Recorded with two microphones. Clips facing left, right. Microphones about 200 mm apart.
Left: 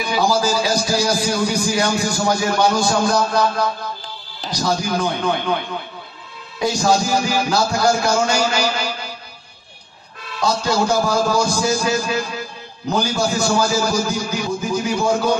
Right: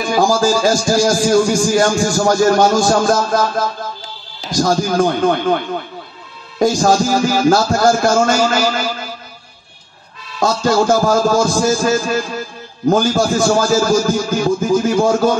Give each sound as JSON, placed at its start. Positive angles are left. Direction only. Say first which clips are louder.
{"t": 0.0, "sound": "a man's voice", "louder": "right 4 dB", "side_deg": -45}
{"t": 6.6, "sound": "a man's voice", "louder": "right 5 dB", "side_deg": -50}
{"t": 10.4, "sound": "a man's voice", "louder": "right 5 dB", "side_deg": -50}